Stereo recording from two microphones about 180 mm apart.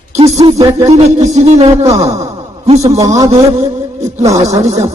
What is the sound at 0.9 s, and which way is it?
Music, 40° right (ahead or behind).